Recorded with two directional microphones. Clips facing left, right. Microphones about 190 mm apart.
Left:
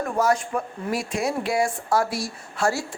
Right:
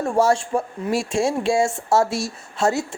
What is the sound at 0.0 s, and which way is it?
Speech, 30° right (ahead or behind).